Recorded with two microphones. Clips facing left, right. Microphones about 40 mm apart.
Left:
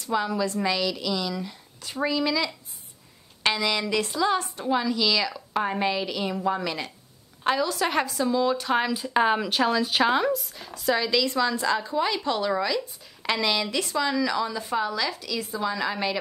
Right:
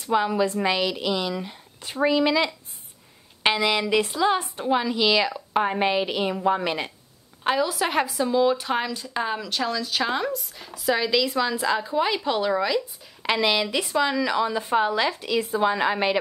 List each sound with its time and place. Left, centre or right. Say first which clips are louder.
0.0 s a woman's voice: right 4 dB; right
7.4 s speech: right 1 dB; centre
8.9 s speech: left 5 dB; centre
10.0 s speech: left 3 dB; centre; by 16.2 s right